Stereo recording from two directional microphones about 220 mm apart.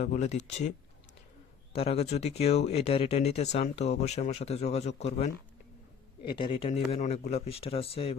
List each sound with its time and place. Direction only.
0.0 s speech: 30° left (ahead or behind)
1.7 s speech: 25° left (ahead or behind)
6.3 s speech: 20° left (ahead or behind)